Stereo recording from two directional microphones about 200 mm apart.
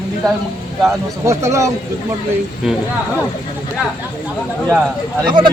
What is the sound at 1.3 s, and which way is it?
Speech, 15° right (ahead or behind).